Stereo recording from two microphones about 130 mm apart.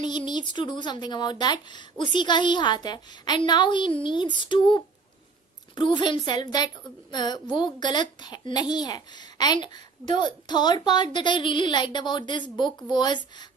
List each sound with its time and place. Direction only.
0.0 s a woman's voice: 35° left (ahead or behind)